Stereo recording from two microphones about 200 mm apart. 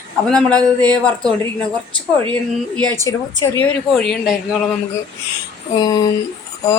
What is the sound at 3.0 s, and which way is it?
Speech, 15° left (ahead or behind).